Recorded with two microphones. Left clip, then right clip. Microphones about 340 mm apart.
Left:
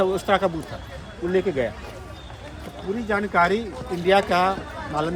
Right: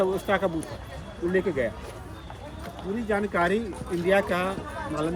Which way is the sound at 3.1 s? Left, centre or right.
Centre.